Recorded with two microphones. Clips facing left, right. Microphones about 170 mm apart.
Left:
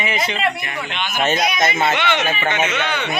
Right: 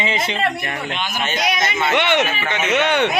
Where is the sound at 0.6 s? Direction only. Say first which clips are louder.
Right 1 dB; 45° right (ahead or behind).